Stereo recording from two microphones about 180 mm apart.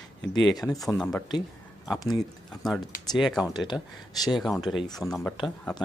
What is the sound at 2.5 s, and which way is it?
Speech, 5° left (ahead or behind).